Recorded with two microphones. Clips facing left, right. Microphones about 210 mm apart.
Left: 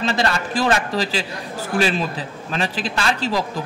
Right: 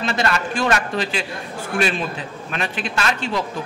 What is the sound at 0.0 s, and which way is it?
A man's voice, 35° left (ahead or behind).